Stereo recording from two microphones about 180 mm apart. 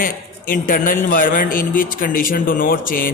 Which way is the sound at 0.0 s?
50° left (ahead or behind).